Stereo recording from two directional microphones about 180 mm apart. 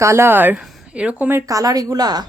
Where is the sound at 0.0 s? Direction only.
15° right (ahead or behind).